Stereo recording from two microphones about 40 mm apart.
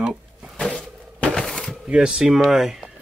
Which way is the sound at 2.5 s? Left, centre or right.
Centre.